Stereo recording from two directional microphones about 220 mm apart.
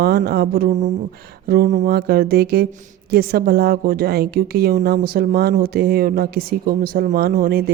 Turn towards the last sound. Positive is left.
turn(degrees=-45)  # may be behind; listen again after turning